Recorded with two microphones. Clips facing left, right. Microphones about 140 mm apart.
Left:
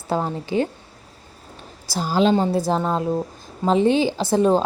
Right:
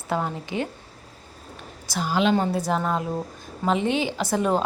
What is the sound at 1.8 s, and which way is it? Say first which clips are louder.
A woman's voice: left 4 dB; 35° left (ahead or behind).